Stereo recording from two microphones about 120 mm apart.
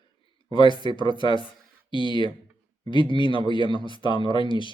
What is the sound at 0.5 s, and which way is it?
Speech, 45° left (ahead or behind).